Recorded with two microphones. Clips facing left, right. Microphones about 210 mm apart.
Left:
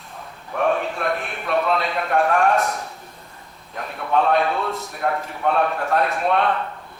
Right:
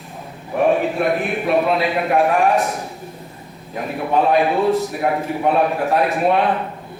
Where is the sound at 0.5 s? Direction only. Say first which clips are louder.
Right 5 dB; 15° right (ahead or behind).